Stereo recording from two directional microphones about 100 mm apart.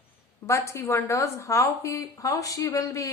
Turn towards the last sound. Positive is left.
turn(degrees=35)  # may be behind; listen again after turning